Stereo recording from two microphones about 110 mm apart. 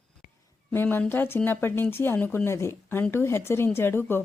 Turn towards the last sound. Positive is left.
turn(degrees=20)  # may be behind; listen again after turning